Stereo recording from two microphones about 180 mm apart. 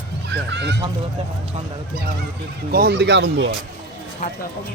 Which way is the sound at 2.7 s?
60° right (ahead or behind).